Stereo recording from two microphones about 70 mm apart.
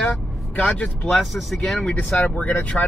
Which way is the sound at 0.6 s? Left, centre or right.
Centre.